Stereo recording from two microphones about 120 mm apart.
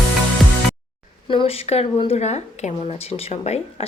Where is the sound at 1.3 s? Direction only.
60° left (ahead or behind).